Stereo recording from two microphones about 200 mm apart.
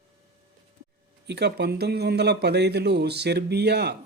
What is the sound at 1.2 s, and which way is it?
Speech, 55° right (ahead or behind).